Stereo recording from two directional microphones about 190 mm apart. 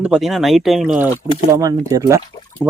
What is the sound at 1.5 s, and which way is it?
Speech, 20° right (ahead or behind).